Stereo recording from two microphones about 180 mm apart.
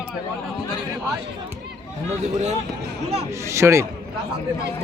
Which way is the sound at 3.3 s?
15° right (ahead or behind).